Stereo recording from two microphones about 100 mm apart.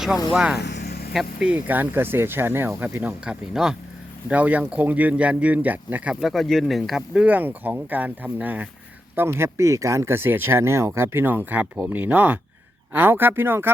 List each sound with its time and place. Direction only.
0.3 s speech: 5° right (ahead or behind)
3.5 s speech: 5° right (ahead or behind)
6.3 s speech: centre (ahead or behind)
7.1 s speech: 15° right (ahead or behind)